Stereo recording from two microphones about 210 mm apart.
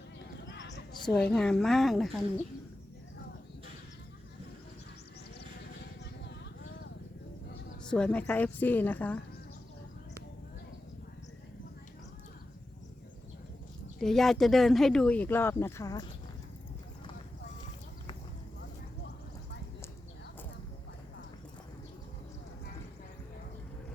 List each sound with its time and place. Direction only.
0.4 s a sound: 60° left (ahead or behind)
1.0 s speech: centre (ahead or behind)
7.9 s a woman's voice: 5° left (ahead or behind)
14.0 s speech: centre (ahead or behind)